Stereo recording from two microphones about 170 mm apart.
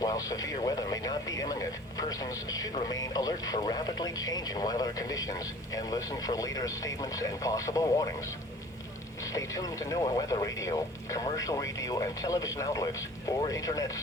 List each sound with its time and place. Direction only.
0.0 s speech: 20° left (ahead or behind)